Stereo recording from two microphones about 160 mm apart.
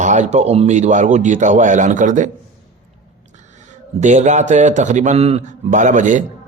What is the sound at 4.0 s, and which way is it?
A man's voice, 50° right (ahead or behind).